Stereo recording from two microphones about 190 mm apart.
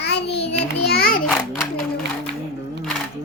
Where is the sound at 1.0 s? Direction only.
50° left (ahead or behind).